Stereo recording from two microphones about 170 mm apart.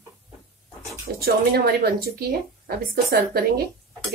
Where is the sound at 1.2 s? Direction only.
65° right (ahead or behind).